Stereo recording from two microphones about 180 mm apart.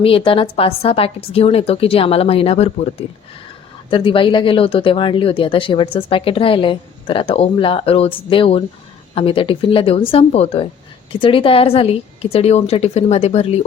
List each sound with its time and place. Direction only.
0.0 s speech: 30° left (ahead or behind)